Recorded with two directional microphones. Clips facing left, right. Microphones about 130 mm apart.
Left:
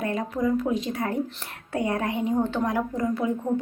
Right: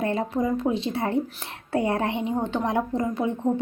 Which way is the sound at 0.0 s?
30° right (ahead or behind).